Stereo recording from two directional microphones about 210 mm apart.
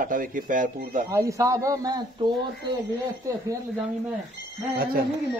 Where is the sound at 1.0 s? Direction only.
15° right (ahead or behind).